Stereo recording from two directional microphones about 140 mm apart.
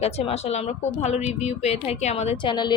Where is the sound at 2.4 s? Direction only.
30° left (ahead or behind).